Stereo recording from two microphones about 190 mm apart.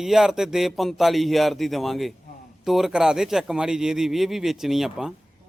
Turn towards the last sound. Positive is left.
turn(degrees=0)  # may be behind; listen again after turning